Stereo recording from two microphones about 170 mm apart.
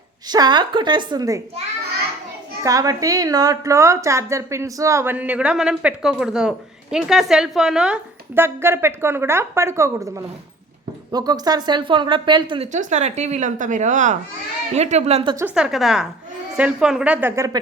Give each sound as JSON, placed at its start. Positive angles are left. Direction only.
{"t": 0.3, "sound": "a woman's voice", "side_deg": -25}
{"t": 2.6, "sound": "a woman's voice", "side_deg": -20}
{"t": 12.7, "sound": "a woman's voice", "side_deg": -45}
{"t": 15.5, "sound": "a woman's voice", "side_deg": -5}